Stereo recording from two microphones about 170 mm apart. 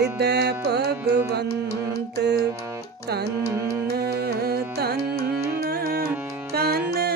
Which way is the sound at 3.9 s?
65° right (ahead or behind).